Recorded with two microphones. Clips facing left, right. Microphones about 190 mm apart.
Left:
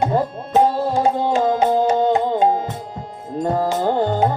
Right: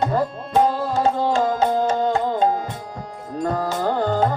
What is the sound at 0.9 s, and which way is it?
Tabla, 15° left (ahead or behind).